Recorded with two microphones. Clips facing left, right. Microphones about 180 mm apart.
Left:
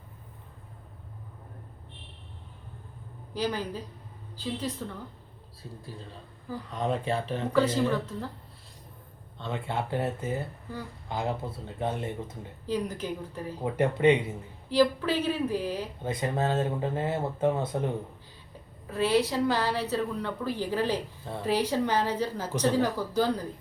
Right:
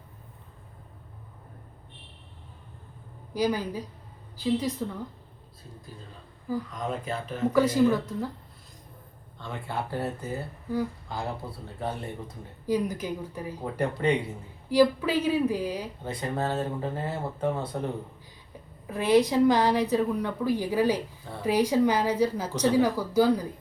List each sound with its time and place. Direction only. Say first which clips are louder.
3.3 s a woman's voice: right 4 dB; 10° right (ahead or behind)
6.7 s speech: left 3 dB; 30° left (ahead or behind)
7.5 s a woman's voice: right 3 dB; 10° right (ahead or behind)
9.4 s speech: left 2 dB; 25° left (ahead or behind)
12.6 s a woman's voice: right 3 dB; 10° right (ahead or behind)
13.6 s speech: left 4 dB; 20° left (ahead or behind)
14.7 s a woman's voice: right 2 dB; 10° right (ahead or behind)
16.0 s speech: left 2 dB; 20° left (ahead or behind)
18.9 s a woman's voice: right 3 dB; 15° right (ahead or behind)